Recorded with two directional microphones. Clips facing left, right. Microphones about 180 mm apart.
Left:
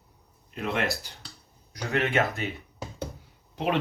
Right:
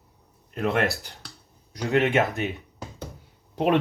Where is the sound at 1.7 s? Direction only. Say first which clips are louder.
Right 4 dB; 20° right (ahead or behind).